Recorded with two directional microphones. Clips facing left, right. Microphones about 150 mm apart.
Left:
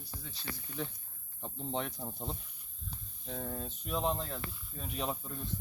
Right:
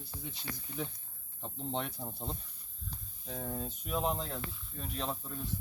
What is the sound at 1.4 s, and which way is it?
Speech, centre (ahead or behind).